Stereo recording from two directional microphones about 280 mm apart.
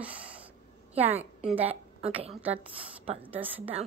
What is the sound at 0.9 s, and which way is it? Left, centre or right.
Speech, right.